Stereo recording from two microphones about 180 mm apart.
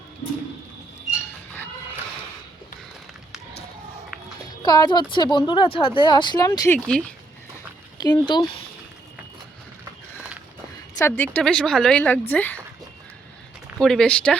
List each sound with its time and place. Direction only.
4.6 s speech: 20° left (ahead or behind)
6.7 s a woman's voice: 5° left (ahead or behind)
7.9 s speech: 25° left (ahead or behind)
10.9 s a woman's voice: 10° left (ahead or behind)
13.7 s a woman's voice: centre (ahead or behind)